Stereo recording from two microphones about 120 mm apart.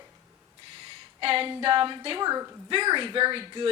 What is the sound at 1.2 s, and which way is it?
Speech, 50° right (ahead or behind).